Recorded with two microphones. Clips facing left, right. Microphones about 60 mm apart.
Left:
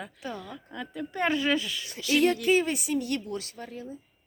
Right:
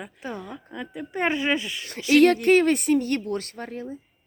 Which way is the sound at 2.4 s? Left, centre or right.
Right.